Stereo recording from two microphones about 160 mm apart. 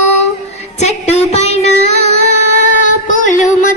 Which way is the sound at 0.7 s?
45° left (ahead or behind).